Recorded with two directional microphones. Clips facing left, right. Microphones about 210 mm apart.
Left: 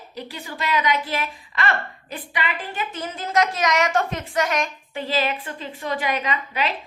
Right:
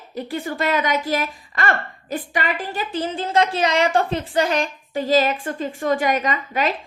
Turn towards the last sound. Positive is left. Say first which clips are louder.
# right 3 dB
turn(degrees=-45)  # may be behind; listen again after turning